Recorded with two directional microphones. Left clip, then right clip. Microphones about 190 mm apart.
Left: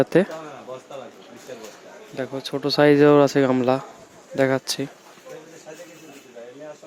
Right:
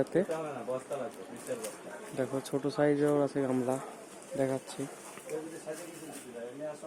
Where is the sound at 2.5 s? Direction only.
20° left (ahead or behind).